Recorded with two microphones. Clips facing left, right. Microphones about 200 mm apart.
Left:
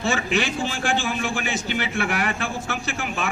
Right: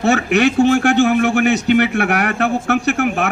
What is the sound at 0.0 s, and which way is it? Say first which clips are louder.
A man's voice: right 9 dB; 65° right (ahead or behind).